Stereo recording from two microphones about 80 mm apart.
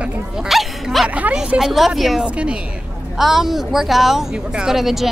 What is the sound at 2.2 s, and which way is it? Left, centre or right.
Speech, centre.